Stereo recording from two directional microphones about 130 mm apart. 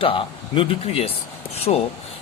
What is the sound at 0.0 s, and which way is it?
Speech, 45° left (ahead or behind).